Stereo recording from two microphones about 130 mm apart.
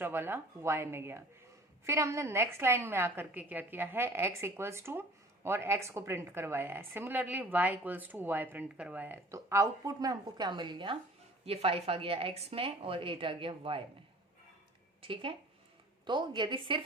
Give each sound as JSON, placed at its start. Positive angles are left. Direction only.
{"t": 0.0, "sound": "a woman's voice", "side_deg": -15}
{"t": 11.4, "sound": "a woman's voice", "side_deg": -50}
{"t": 15.0, "sound": "a woman's voice", "side_deg": -45}